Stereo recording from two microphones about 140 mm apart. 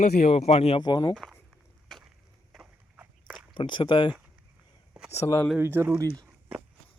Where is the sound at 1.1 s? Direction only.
Centre (ahead or behind).